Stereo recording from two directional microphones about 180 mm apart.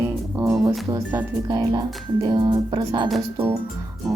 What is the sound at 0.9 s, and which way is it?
Speech, 15° right (ahead or behind).